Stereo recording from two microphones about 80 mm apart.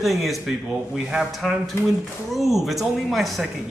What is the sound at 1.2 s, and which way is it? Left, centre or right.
A man's voice, centre.